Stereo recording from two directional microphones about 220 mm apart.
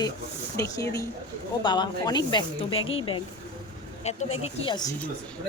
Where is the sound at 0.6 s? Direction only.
15° left (ahead or behind).